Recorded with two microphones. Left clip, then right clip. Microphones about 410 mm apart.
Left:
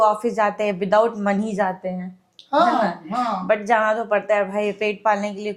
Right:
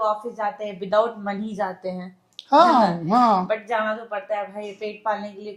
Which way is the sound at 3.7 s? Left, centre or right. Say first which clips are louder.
Left 6 dB; left.